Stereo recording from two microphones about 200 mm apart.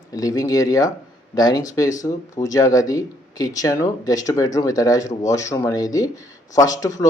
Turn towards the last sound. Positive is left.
turn(degrees=15)  # may be behind; listen again after turning